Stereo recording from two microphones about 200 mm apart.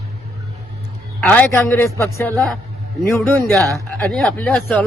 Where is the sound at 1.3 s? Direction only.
10° left (ahead or behind).